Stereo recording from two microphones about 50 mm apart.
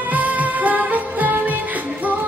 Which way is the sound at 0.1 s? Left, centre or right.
Right.